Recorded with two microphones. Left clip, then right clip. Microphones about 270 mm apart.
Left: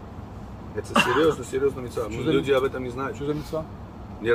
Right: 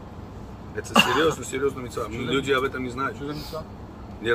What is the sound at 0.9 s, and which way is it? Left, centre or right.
Speech, right.